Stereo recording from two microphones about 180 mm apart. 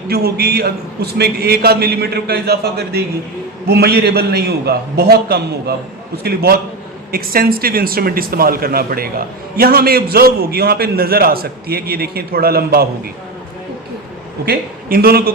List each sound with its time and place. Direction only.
0.1 s speech: 60° right (ahead or behind)
14.4 s speech: 55° right (ahead or behind)